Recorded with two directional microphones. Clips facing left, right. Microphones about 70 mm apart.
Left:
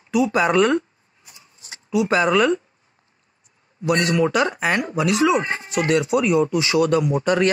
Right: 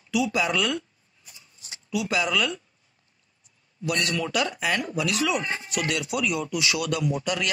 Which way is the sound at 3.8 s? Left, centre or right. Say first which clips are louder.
Left 8 dB; left.